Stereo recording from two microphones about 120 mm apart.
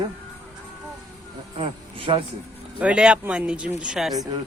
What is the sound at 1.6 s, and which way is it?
Speech, 50° right (ahead or behind).